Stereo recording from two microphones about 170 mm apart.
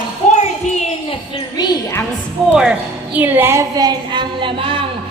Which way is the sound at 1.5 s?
25° left (ahead or behind).